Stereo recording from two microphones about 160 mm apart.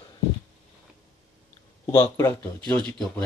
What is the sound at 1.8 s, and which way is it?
Speech, 35° left (ahead or behind).